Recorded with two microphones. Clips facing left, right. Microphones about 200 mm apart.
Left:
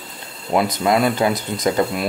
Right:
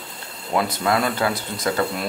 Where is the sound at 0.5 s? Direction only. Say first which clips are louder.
Left 4 dB; 20° left (ahead or behind).